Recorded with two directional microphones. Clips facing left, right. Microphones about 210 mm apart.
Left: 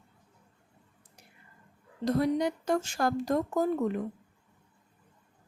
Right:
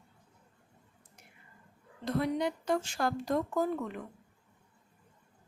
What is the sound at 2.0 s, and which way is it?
A woman's voice, 40° left (ahead or behind).